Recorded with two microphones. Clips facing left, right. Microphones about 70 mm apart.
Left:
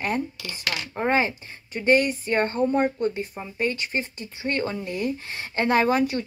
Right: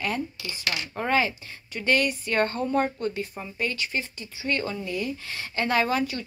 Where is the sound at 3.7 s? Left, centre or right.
Left.